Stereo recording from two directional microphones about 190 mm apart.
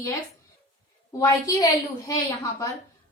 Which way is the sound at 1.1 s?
15° left (ahead or behind).